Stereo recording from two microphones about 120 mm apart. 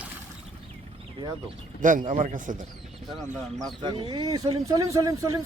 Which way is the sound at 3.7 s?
45° right (ahead or behind).